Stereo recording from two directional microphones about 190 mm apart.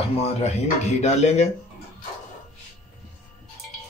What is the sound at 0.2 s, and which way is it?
Speech, 35° left (ahead or behind).